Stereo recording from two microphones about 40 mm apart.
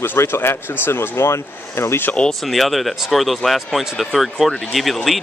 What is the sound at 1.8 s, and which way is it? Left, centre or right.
Speech, left.